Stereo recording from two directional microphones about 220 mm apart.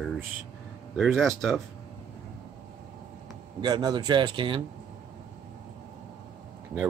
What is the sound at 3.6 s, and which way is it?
A man's voice, 20° right (ahead or behind).